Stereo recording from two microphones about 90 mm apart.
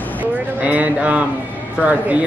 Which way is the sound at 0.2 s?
15° right (ahead or behind).